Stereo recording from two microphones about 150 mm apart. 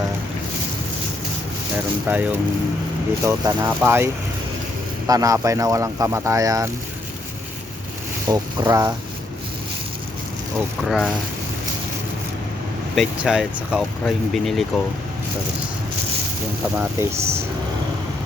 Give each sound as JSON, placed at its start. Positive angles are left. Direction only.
{"t": 1.7, "sound": "speech", "side_deg": -10}
{"t": 8.3, "sound": "speech", "side_deg": -25}
{"t": 10.8, "sound": "speech", "side_deg": 0}
{"t": 13.0, "sound": "speech", "side_deg": 0}
{"t": 16.7, "sound": "speech", "side_deg": -15}